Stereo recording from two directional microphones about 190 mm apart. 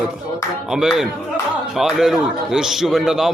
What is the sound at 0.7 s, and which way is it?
A man's voice, 5° right (ahead or behind).